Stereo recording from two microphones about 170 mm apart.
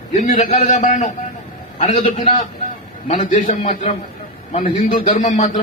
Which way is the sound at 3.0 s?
45° left (ahead or behind).